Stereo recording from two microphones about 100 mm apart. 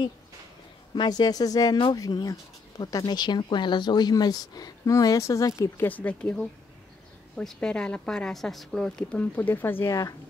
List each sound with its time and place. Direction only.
0.9 s speech: 45° left (ahead or behind)
5.6 s a woman's voice: 20° left (ahead or behind)
7.3 s a woman's voice: 10° left (ahead or behind)
9.2 s speech: 15° left (ahead or behind)